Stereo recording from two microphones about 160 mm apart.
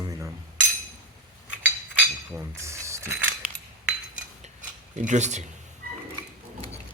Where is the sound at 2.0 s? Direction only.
15° right (ahead or behind).